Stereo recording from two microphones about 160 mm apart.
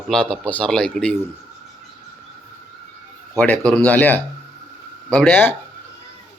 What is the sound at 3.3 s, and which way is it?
Speech, 10° left (ahead or behind).